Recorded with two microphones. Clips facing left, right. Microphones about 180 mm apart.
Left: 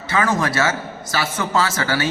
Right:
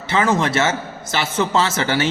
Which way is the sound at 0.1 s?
25° right (ahead or behind).